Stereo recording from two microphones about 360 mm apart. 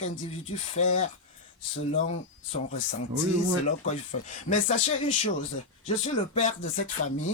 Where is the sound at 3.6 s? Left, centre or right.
Centre.